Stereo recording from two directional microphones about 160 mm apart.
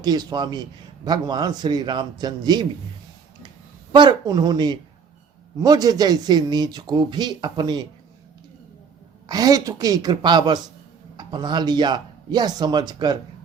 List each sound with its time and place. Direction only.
0.0 s a man's voice: 25° right (ahead or behind)
3.9 s a man's voice: 25° right (ahead or behind)
9.2 s a man's voice: 25° right (ahead or behind)